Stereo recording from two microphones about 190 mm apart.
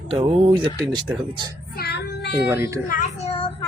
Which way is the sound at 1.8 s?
60° left (ahead or behind).